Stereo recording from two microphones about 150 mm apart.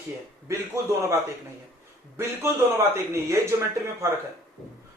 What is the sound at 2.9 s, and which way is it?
Speech, 20° right (ahead or behind).